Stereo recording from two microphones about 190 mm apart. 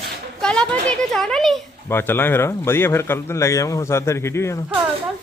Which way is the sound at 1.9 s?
10° left (ahead or behind).